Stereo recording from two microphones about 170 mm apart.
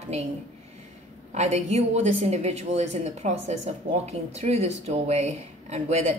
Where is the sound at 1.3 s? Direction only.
40° right (ahead or behind).